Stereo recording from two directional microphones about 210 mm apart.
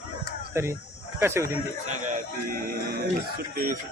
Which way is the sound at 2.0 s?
40° right (ahead or behind).